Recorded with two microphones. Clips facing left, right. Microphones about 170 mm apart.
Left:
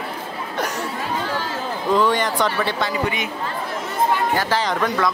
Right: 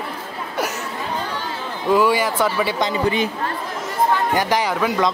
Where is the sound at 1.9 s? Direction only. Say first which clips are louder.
Right 2 dB; 5° right (ahead or behind).